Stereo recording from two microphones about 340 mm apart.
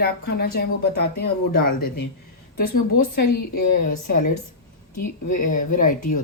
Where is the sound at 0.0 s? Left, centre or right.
Left.